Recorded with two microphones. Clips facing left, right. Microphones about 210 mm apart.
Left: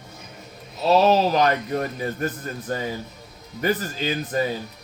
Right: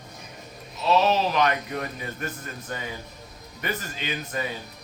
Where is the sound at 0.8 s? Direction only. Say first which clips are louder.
Left 4 dB; 40° left (ahead or behind).